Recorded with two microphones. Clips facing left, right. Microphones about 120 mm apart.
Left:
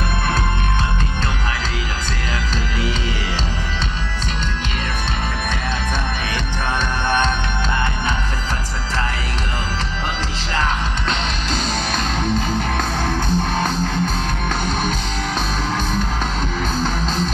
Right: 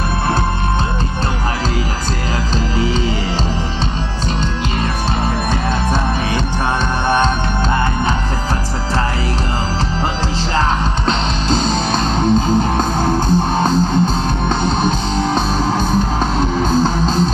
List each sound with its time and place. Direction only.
10.5 s music: 35° right (ahead or behind)